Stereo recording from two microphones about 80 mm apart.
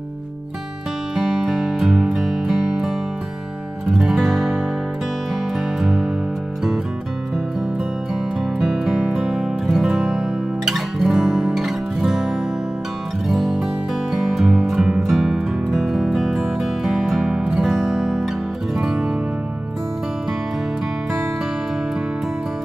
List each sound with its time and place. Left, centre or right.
1.1 s music: centre
3.9 s music: centre
5.8 s music: centre
8.5 s music: centre